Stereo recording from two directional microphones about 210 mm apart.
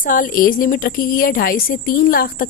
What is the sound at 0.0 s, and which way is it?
A woman's voice, 40° left (ahead or behind).